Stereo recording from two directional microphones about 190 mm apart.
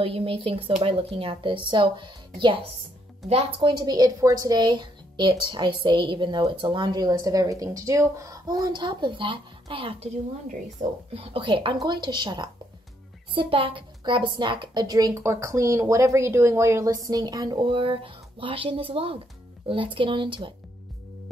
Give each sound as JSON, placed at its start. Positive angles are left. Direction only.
{"t": 0.0, "sound": "a woman's voice", "side_deg": -30}
{"t": 11.1, "sound": "a woman's voice", "side_deg": -25}